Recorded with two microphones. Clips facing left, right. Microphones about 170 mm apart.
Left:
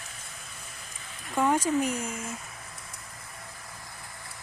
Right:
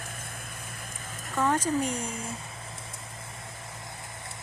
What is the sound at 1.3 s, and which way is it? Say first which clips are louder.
Speech: left 1 dB; 10° left (ahead or behind).